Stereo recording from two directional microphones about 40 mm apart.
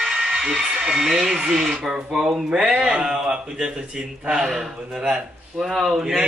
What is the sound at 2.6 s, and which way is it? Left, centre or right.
Speech, right.